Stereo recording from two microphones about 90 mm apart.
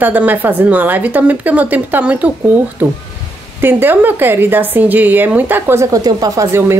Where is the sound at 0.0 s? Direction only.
20° right (ahead or behind).